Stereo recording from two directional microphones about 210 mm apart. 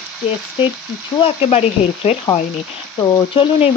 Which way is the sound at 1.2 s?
30° left (ahead or behind).